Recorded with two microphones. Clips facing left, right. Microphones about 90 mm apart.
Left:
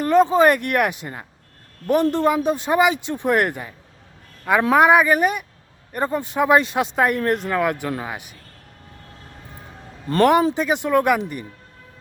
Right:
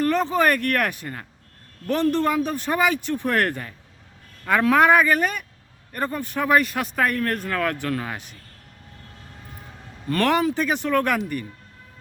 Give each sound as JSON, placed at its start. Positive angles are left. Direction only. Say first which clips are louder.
{"t": 0.0, "sound": "speech", "louder": "left 5 dB", "side_deg": 20}
{"t": 10.1, "sound": "speech", "louder": "left 5 dB", "side_deg": 20}